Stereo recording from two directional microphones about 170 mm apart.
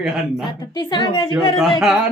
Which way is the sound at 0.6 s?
25° left (ahead or behind).